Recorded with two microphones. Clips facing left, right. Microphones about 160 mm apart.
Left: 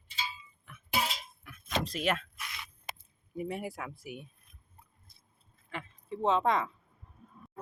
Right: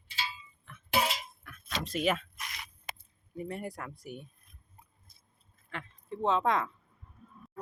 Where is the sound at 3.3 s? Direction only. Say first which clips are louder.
Left 2 dB; 5° left (ahead or behind).